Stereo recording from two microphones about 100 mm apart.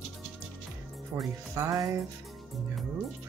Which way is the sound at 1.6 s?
30° right (ahead or behind).